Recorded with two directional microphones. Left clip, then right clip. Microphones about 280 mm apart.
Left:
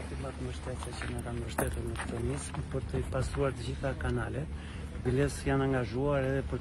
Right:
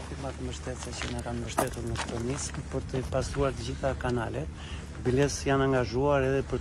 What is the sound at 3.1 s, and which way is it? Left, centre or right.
Speech, right.